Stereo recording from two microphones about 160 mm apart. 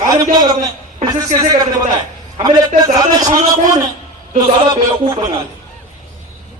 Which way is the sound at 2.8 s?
25° right (ahead or behind).